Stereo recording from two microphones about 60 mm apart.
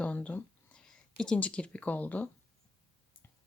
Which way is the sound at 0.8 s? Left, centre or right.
Centre.